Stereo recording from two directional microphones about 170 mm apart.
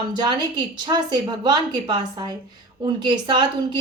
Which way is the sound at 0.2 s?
25° right (ahead or behind).